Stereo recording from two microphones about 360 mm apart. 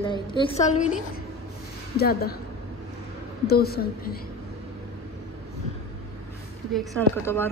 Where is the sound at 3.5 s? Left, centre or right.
Left.